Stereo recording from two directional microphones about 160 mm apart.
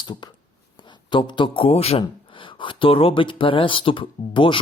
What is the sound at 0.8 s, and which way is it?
A man's voice, 30° left (ahead or behind).